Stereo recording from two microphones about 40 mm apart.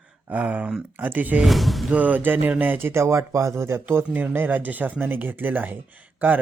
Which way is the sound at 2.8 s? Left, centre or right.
Right.